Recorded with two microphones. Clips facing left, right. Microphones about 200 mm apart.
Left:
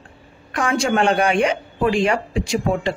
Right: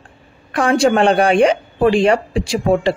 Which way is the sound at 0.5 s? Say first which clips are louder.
Right 6 dB; 30° right (ahead or behind).